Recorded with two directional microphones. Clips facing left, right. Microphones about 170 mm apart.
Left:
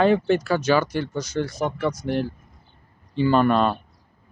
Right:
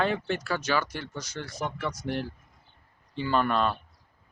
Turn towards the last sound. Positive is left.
turn(degrees=25)  # may be behind; listen again after turning